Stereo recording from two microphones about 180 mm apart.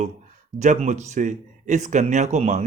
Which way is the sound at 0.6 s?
40° right (ahead or behind).